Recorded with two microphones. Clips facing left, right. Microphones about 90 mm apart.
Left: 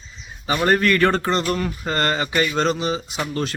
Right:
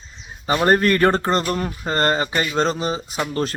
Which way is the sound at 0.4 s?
35° right (ahead or behind).